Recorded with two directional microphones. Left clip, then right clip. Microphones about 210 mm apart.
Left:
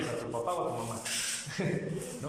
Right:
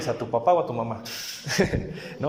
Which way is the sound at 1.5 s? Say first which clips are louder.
Right 17 dB; 50° right (ahead or behind).